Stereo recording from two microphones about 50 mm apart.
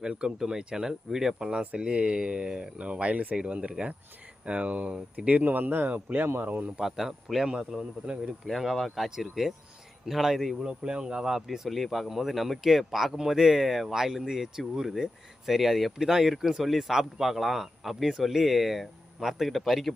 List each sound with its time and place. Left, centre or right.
0.0 s speech: centre; by 6.2 s right
6.2 s speech: right
6.7 s a man's voice: centre
8.0 s speech: right
8.4 s speech: centre
10.6 s speech: centre